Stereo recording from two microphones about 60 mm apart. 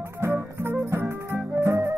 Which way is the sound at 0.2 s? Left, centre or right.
Right.